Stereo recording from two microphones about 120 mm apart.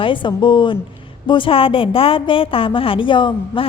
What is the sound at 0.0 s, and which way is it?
A woman's voice, 45° left (ahead or behind).